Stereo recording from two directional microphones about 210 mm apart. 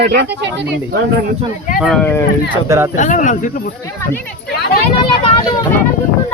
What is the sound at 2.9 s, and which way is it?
Speech, 35° left (ahead or behind).